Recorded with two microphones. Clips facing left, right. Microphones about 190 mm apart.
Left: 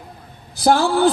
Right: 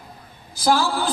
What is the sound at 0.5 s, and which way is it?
Speech, 65° left (ahead or behind).